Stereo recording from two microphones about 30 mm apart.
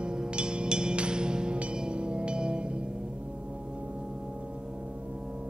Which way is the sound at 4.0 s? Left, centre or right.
Right.